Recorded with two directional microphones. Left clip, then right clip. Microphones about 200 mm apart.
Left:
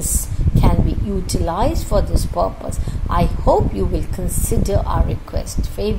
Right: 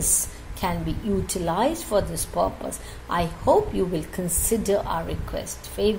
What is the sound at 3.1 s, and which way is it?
Speech, 15° left (ahead or behind).